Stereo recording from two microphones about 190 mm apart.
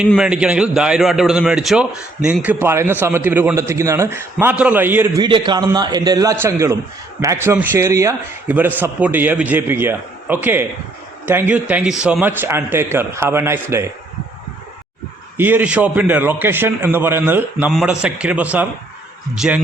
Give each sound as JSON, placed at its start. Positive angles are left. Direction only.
{"t": 0.1, "sound": "a man's voice", "side_deg": -5}
{"t": 5.2, "sound": "a man's voice", "side_deg": -25}
{"t": 15.4, "sound": "a man's voice", "side_deg": -10}